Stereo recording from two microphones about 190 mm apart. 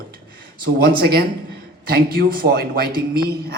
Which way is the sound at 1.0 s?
50° right (ahead or behind).